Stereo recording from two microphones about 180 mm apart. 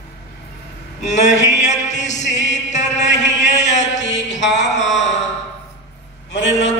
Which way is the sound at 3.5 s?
40° left (ahead or behind).